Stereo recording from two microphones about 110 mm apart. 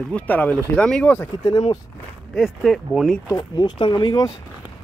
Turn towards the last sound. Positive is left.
turn(degrees=40)  # may be behind; listen again after turning